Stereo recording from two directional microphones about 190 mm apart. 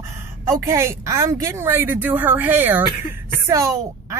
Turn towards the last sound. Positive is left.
turn(degrees=-15)  # may be behind; listen again after turning